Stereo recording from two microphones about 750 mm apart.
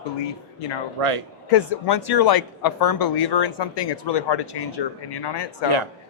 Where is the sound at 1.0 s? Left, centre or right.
Right.